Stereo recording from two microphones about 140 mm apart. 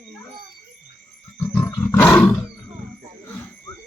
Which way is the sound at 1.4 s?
15° left (ahead or behind).